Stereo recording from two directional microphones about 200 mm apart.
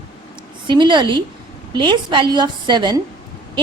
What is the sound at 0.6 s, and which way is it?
A woman's voice, 25° right (ahead or behind).